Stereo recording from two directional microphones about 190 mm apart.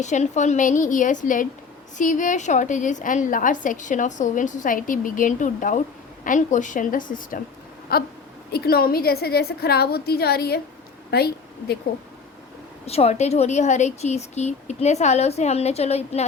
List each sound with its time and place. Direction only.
0.0 s a woman's voice: 40° left (ahead or behind); by 11.3 s 60° left (ahead or behind)
12.8 s a woman's voice: 35° left (ahead or behind)